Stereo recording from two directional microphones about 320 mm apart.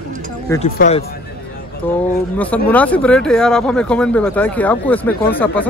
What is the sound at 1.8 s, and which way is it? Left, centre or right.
Speech, centre.